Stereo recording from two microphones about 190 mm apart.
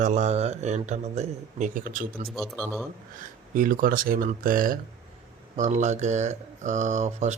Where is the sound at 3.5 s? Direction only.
45° right (ahead or behind).